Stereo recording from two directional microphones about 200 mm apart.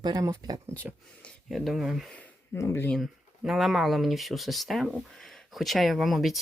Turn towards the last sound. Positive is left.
turn(degrees=0)  # may be behind; listen again after turning